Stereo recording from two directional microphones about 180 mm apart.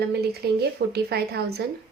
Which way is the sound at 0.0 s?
65° right (ahead or behind).